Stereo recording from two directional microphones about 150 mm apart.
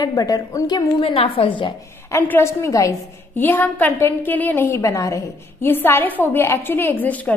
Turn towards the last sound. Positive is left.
turn(degrees=10)  # may be behind; listen again after turning